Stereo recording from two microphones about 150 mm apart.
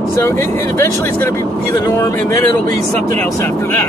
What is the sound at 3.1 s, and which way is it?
Speech, 15° left (ahead or behind).